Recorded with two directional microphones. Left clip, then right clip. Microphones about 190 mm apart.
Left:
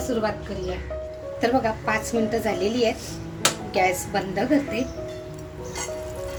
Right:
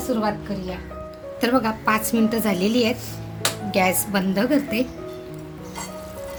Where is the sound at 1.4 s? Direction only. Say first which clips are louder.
Right 1 dB; 60° right (ahead or behind).